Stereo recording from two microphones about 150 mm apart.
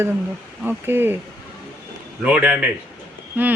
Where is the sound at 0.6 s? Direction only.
10° right (ahead or behind).